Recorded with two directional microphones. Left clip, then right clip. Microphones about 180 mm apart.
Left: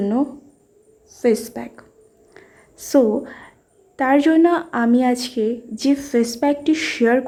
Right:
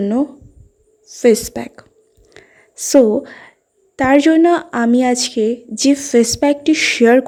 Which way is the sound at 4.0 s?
35° right (ahead or behind).